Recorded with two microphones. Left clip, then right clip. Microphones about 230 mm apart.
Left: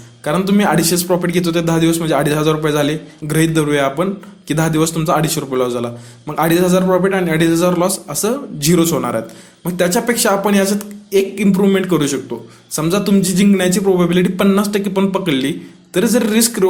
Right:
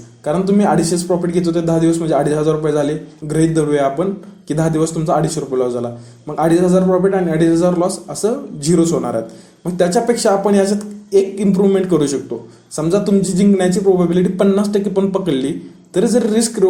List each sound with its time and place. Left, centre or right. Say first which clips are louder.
0.3 s a man's voice: even; left
6.8 s a man's voice: even; left
7.1 s a man's voice: even; left